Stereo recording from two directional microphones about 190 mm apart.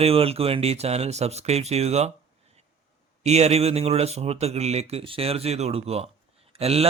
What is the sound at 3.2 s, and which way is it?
Speech, 35° right (ahead or behind).